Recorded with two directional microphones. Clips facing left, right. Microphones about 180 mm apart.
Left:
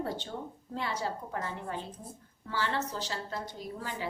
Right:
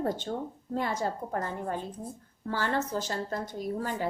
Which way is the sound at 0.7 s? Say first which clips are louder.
Right 4 dB; 45° right (ahead or behind).